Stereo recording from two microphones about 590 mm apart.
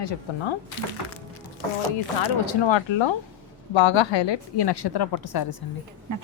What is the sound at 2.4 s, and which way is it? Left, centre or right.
A woman's voice, left.